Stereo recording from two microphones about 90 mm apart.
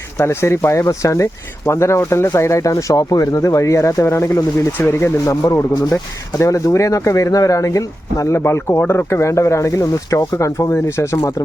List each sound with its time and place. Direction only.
0.2 s speech: 30° left (ahead or behind)